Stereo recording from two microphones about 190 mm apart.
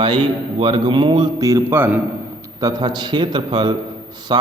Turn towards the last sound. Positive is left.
turn(degrees=-25)  # may be behind; listen again after turning